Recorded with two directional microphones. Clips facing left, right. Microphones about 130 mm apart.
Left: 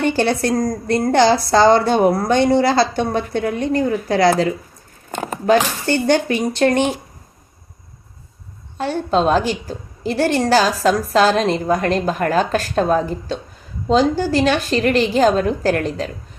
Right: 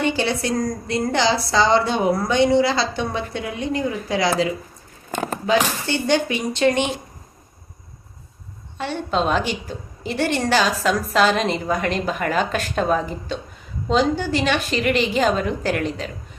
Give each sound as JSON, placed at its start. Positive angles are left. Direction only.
{"t": 0.0, "sound": "a woman's voice", "side_deg": 50}
{"t": 5.5, "sound": "a woman's voice", "side_deg": 50}
{"t": 8.8, "sound": "a woman's voice", "side_deg": 40}